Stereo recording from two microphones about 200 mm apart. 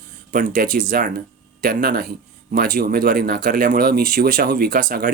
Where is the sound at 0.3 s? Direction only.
45° right (ahead or behind).